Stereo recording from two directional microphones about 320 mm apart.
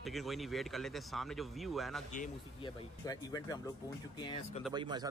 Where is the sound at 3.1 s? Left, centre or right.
Centre.